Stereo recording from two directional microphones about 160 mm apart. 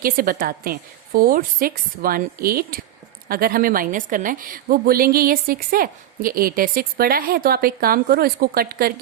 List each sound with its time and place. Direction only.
0.0 s a woman's voice: 65° right (ahead or behind)